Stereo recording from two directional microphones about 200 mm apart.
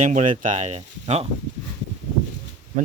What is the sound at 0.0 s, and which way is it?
Speech, 40° right (ahead or behind).